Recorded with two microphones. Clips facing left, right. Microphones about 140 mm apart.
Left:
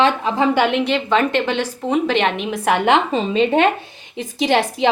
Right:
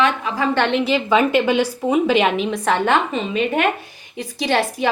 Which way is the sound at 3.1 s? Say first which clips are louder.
Left 4 dB; 30° left (ahead or behind).